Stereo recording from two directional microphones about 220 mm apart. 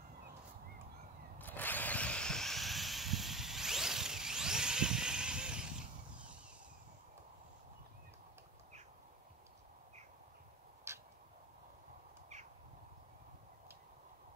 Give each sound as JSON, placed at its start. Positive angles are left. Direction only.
{"t": 1.4, "sound": "vehicle", "side_deg": 10}